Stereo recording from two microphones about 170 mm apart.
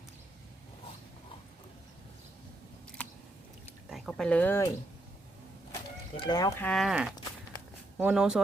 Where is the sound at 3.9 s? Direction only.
5° left (ahead or behind).